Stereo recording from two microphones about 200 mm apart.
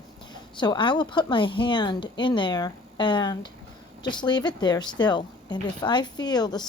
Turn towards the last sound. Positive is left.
turn(degrees=20)  # may be behind; listen again after turning